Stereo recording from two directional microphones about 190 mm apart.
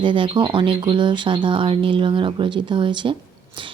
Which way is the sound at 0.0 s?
25° right (ahead or behind).